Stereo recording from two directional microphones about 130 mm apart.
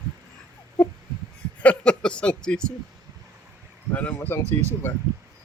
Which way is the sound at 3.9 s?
10° left (ahead or behind).